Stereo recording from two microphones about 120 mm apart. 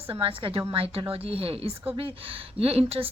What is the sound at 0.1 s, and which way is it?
A woman's voice, 45° right (ahead or behind).